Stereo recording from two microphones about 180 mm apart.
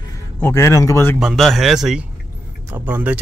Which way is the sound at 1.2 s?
Centre (ahead or behind).